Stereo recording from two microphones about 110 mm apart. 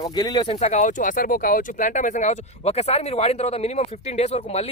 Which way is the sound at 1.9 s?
90° left.